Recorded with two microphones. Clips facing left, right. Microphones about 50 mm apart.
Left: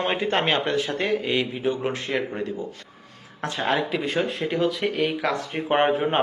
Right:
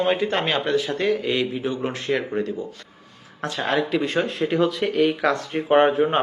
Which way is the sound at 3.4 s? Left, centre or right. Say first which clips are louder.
Right 1 dB; left.